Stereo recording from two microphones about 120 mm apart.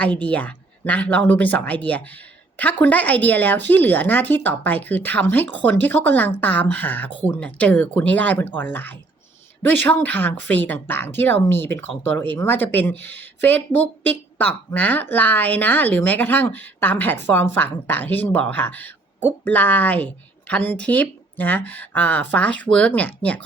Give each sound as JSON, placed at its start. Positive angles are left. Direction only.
{"t": 0.0, "sound": "speech", "side_deg": 10}